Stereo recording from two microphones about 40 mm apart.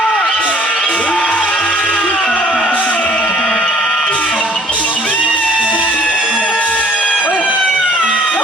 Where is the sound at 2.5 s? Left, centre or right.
Right.